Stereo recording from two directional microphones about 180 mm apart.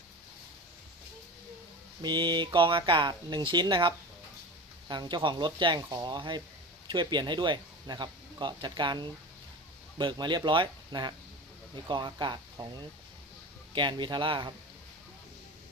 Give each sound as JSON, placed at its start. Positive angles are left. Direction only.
{"t": 2.0, "sound": "speech", "side_deg": -25}
{"t": 13.7, "sound": "speech", "side_deg": -25}